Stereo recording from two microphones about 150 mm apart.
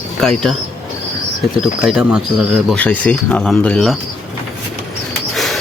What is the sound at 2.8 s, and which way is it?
Speech, 10° left (ahead or behind).